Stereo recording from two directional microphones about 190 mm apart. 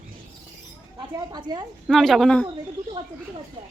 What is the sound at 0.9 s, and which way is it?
Mouse, 20° right (ahead or behind).